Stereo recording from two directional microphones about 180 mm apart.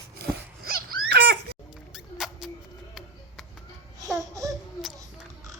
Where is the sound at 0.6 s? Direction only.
55° right (ahead or behind).